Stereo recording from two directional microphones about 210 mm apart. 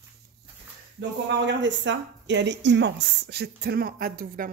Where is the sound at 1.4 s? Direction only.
60° right (ahead or behind).